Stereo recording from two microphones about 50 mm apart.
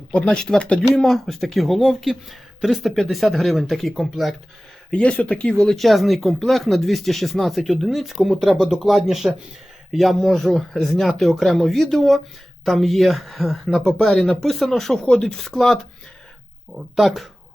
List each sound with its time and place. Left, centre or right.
0.1 s speech: left
0.9 s speech: centre
4.9 s speech: left
5.7 s speech: centre
16.9 s speech: centre